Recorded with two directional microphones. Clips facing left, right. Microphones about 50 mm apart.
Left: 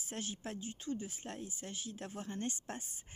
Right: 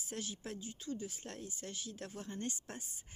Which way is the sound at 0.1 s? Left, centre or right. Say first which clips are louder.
Left 1 dB; left.